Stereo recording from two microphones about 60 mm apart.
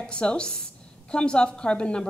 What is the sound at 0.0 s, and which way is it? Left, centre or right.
A woman's voice, centre.